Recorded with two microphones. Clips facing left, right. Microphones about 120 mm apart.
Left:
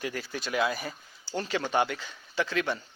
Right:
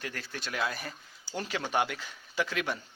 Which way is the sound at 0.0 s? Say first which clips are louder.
Left 5 dB; 5° left (ahead or behind).